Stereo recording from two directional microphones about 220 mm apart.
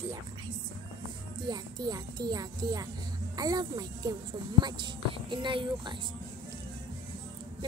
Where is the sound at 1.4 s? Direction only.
20° right (ahead or behind).